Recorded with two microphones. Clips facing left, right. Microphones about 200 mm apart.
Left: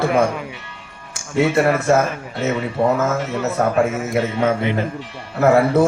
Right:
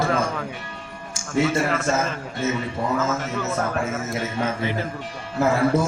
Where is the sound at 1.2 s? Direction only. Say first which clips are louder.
Left 4 dB; 60° left (ahead or behind).